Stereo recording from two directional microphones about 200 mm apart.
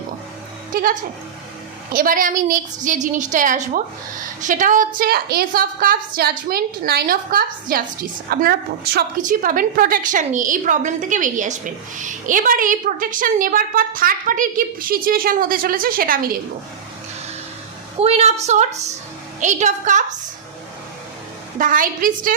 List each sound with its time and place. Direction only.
0.7 s a woman's voice: 45° right (ahead or behind)
18.0 s a woman's voice: 30° right (ahead or behind)
21.6 s a woman's voice: 45° right (ahead or behind)